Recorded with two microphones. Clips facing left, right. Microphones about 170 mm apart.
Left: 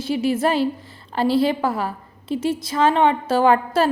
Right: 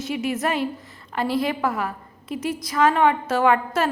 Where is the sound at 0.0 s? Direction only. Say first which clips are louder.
Left 5 dB; 30° left (ahead or behind).